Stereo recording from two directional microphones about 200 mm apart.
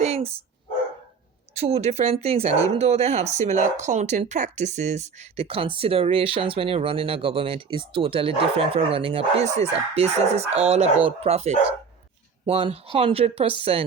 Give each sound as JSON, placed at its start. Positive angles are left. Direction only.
{"t": 0.0, "sound": "dog", "side_deg": -30}
{"t": 1.5, "sound": "speech", "side_deg": -30}